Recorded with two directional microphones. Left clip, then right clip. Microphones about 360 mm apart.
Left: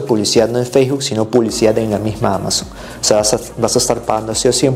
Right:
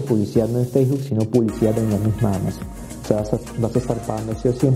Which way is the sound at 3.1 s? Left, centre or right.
Centre.